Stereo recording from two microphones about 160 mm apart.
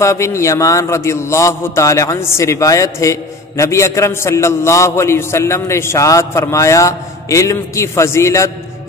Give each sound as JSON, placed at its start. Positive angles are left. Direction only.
{"t": 0.0, "sound": "a man's voice", "side_deg": 20}